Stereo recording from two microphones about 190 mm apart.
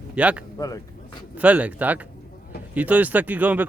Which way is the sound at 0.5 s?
20° left (ahead or behind).